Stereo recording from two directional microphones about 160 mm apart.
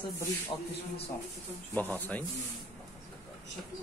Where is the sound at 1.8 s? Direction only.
10° left (ahead or behind).